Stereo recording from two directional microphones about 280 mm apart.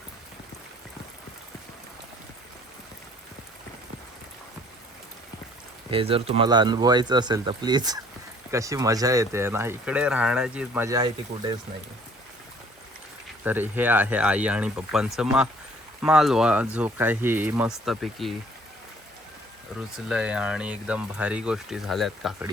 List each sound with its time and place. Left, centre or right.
5.9 s speech: centre
13.4 s speech: centre
20.1 s speech: centre